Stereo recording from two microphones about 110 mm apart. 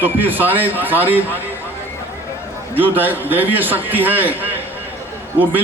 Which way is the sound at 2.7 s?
15° right (ahead or behind).